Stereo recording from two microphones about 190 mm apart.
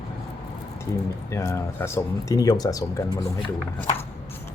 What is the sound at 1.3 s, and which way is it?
Speech, 15° left (ahead or behind).